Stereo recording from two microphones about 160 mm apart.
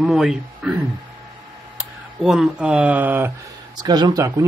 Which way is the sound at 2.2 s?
Centre (ahead or behind).